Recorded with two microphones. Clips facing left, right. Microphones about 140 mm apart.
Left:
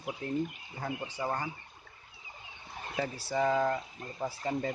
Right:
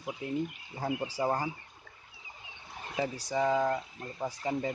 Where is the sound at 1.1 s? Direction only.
30° right (ahead or behind).